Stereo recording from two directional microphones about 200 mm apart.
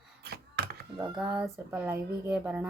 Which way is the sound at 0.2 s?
55° right (ahead or behind).